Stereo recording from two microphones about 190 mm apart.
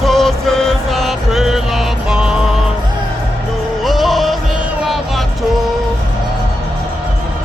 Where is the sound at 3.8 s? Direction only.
Centre (ahead or behind).